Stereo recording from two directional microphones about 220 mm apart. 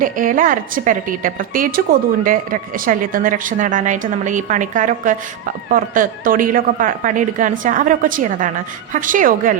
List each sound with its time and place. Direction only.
0.0 s a woman's voice: 40° right (ahead or behind)